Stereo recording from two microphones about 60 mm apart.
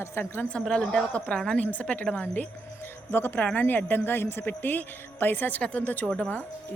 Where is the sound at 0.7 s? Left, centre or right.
Centre.